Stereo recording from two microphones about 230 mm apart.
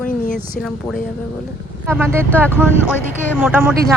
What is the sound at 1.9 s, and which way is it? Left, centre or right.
Speech, centre.